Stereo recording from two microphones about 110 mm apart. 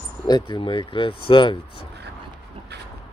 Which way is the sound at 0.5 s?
50° left (ahead or behind).